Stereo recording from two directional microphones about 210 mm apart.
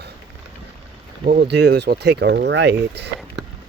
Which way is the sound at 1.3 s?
50° right (ahead or behind).